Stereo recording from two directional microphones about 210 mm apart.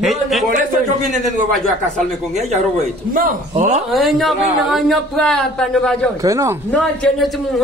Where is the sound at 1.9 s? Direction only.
35° right (ahead or behind).